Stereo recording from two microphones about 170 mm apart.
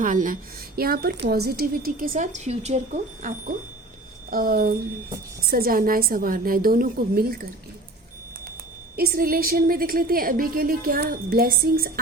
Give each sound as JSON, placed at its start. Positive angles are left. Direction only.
{"t": 0.0, "sound": "a woman's voice", "side_deg": -50}
{"t": 0.8, "sound": "a woman's voice", "side_deg": -65}
{"t": 9.0, "sound": "a woman's voice", "side_deg": -60}